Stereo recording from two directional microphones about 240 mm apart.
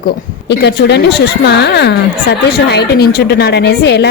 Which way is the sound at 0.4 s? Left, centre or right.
Left.